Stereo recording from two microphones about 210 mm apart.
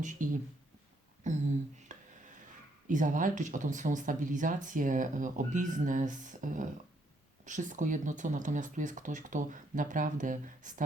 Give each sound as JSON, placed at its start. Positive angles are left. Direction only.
{"t": 0.0, "sound": "speech", "side_deg": -35}
{"t": 1.2, "sound": "a sound", "side_deg": -35}
{"t": 2.8, "sound": "speech", "side_deg": -40}